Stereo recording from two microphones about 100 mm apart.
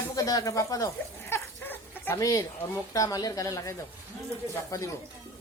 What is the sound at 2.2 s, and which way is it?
Speech, 35° left (ahead or behind).